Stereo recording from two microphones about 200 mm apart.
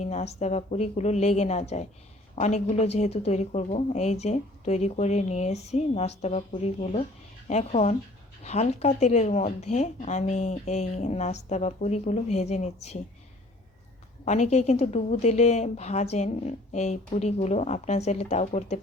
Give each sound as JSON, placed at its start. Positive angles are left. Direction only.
{"t": 0.0, "sound": "speech", "side_deg": 35}
{"t": 14.3, "sound": "speech", "side_deg": 35}